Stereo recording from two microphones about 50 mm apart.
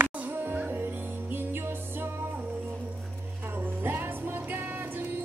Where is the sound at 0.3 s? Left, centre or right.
Right.